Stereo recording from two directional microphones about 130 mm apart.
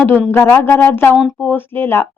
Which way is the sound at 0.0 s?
15° left (ahead or behind).